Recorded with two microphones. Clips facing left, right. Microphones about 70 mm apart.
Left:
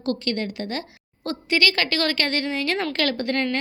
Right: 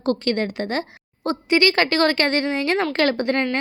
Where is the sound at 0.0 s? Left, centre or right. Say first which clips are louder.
Right 4 dB; right.